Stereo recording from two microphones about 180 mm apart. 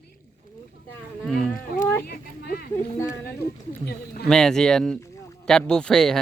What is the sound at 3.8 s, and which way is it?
Speech, 60° left (ahead or behind).